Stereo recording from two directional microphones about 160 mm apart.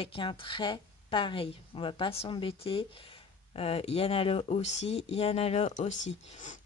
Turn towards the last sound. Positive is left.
turn(degrees=45)  # may be behind; listen again after turning